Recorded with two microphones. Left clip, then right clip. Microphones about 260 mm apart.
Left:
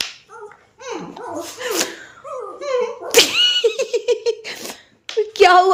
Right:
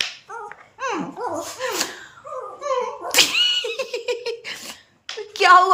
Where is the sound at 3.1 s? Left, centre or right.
Centre.